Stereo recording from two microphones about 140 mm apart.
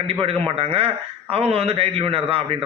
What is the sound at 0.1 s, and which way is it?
A man's voice, 40° right (ahead or behind).